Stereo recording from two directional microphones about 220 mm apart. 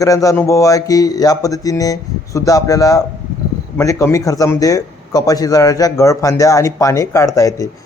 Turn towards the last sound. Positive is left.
turn(degrees=15)  # may be behind; listen again after turning